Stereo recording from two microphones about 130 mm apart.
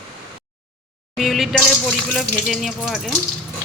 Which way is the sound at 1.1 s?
Centre (ahead or behind).